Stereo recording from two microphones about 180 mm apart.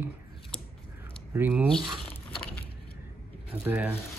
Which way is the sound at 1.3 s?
10° right (ahead or behind).